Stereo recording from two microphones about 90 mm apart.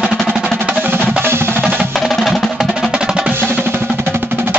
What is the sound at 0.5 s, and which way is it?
Music, 20° right (ahead or behind).